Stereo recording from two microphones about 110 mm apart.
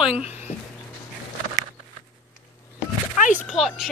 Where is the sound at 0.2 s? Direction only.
85° left.